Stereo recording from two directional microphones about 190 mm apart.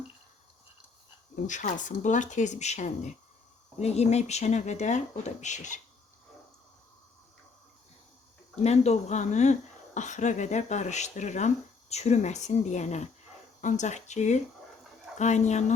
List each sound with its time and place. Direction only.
1.5 s speech: 40° left (ahead or behind)
8.6 s speech: 35° left (ahead or behind)